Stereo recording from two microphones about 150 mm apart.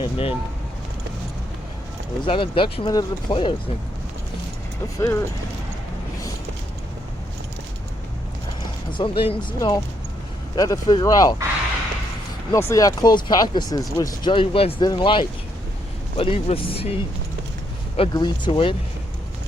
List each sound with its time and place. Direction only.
0.0 s speech: 40° left (ahead or behind)
2.2 s speech: 35° left (ahead or behind)
4.9 s speech: 20° left (ahead or behind)
8.9 s speech: 35° left (ahead or behind)
12.5 s speech: 20° left (ahead or behind)
14.3 s speech: 35° left (ahead or behind)